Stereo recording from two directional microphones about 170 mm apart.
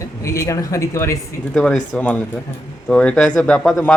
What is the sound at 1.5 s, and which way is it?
Speech, centre (ahead or behind).